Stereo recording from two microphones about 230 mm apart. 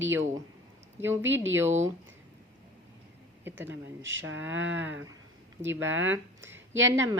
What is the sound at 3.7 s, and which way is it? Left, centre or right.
Speech, right.